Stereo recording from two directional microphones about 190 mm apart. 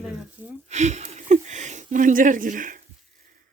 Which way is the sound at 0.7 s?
35° right (ahead or behind).